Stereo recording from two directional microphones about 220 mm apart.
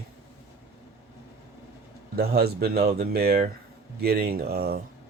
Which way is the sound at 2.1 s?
45° right (ahead or behind).